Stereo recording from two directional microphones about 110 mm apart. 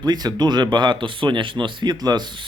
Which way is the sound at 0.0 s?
40° right (ahead or behind).